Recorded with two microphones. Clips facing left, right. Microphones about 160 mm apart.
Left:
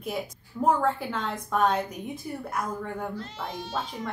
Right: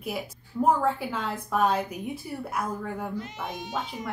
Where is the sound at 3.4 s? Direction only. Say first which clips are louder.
Left 3 dB; 15° right (ahead or behind).